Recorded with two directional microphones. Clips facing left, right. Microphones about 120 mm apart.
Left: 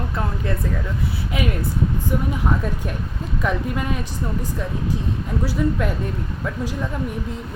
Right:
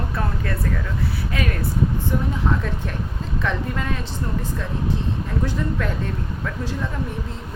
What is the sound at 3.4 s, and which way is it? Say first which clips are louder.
Speech: left 2 dB; 15° left (ahead or behind).